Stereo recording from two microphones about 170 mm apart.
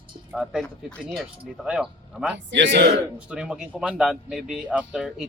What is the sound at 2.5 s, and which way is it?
Speech, 90° right.